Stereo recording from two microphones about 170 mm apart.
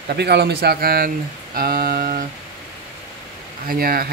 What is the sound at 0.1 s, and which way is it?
Speech, 75° right (ahead or behind).